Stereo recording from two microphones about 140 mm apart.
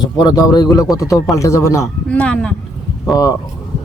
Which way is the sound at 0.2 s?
30° left (ahead or behind).